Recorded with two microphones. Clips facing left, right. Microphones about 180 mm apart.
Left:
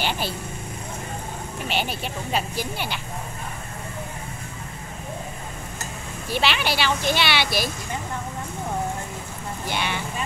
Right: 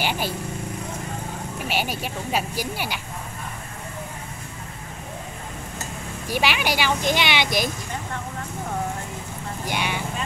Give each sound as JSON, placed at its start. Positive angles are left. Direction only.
{"t": 0.0, "sound": "vehicle", "side_deg": -10}
{"t": 1.7, "sound": "a child's voice", "side_deg": -10}
{"t": 6.2, "sound": "a child's voice", "side_deg": -10}
{"t": 9.7, "sound": "a child's voice", "side_deg": -10}